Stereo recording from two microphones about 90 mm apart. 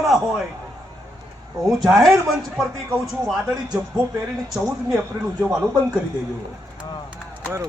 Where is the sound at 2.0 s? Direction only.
Centre (ahead or behind).